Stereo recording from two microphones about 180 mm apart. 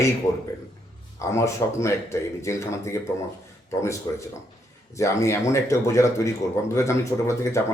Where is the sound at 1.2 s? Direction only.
15° left (ahead or behind).